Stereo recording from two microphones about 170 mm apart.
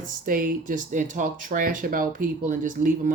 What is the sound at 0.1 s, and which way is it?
Speech, 55° right (ahead or behind).